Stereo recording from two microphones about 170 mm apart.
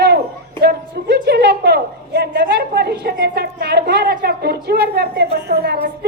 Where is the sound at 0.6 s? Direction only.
70° right (ahead or behind).